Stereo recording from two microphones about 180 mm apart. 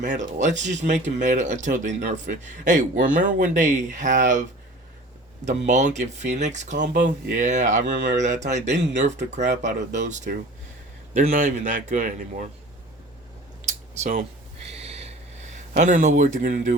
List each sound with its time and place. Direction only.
0.0 s a man's voice: 45° right (ahead or behind)
5.5 s a man's voice: 40° right (ahead or behind)
13.7 s a sound: 45° right (ahead or behind)